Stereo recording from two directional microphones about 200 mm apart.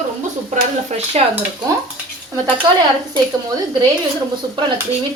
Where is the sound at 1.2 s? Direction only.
35° right (ahead or behind).